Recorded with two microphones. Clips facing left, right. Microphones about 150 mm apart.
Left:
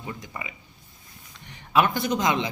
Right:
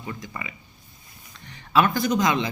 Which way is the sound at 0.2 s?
20° left (ahead or behind).